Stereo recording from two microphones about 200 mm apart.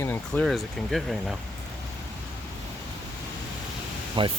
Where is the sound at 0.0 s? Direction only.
10° left (ahead or behind).